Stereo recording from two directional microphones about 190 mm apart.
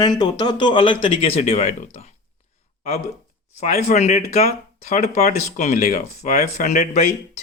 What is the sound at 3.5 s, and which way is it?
Speech, 40° left (ahead or behind).